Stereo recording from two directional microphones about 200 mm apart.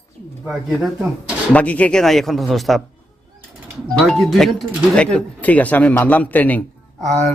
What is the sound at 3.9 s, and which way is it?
Speech, 5° left (ahead or behind).